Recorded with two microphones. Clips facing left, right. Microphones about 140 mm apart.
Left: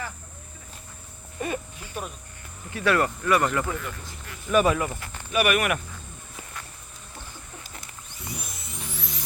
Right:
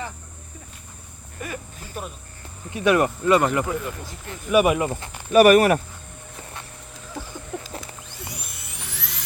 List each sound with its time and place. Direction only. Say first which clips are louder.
1.4 s cricket: left 4 dB; 25° left (ahead or behind)
2.6 s speech: right 4 dB; 20° right (ahead or behind)
4.9 s speech: right 6 dB; 25° right (ahead or behind)
5.3 s speech: right 10 dB; 40° right (ahead or behind)
7.5 s a sound: right 10 dB; 75° right (ahead or behind)